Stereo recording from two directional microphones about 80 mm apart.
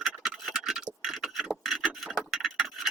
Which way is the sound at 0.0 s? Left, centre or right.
Centre.